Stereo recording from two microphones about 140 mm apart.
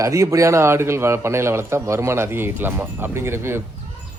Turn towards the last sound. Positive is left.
turn(degrees=-15)  # may be behind; listen again after turning